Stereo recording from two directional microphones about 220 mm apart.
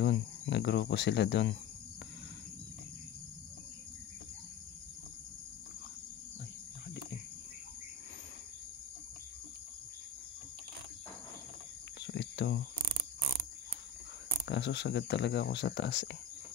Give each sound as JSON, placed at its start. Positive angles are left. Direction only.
{"t": 0.0, "sound": "speech", "side_deg": 50}
{"t": 12.1, "sound": "a sound", "side_deg": 50}
{"t": 14.4, "sound": "speech", "side_deg": 50}